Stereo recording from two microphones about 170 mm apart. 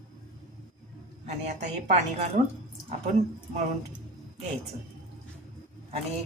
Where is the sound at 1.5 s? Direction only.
40° right (ahead or behind).